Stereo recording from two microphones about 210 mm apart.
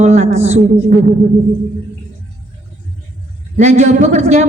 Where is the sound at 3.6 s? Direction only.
35° right (ahead or behind).